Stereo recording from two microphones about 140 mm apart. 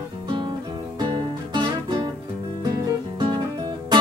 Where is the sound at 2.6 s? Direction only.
30° right (ahead or behind).